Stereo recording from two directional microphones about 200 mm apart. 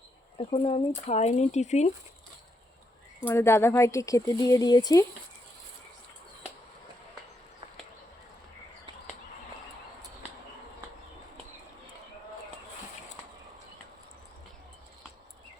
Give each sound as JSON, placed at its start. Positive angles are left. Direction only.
{"t": 0.3, "sound": "speech", "side_deg": 30}
{"t": 3.2, "sound": "speech", "side_deg": 10}